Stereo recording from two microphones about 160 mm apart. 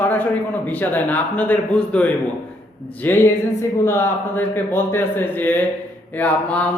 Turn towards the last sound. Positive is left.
turn(degrees=10)  # may be behind; listen again after turning